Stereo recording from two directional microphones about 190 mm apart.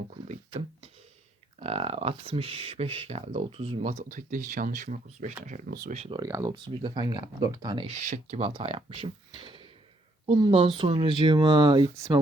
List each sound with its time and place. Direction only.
1.5 s speech: 35° right (ahead or behind)
6.1 s speech: 15° right (ahead or behind)